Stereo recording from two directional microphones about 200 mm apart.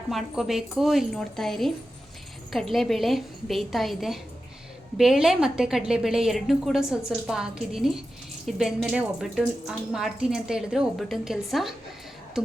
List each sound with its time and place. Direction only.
0.1 s speech: centre (ahead or behind)